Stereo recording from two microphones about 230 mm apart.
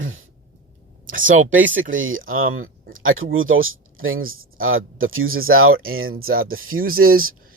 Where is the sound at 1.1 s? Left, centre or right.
Right.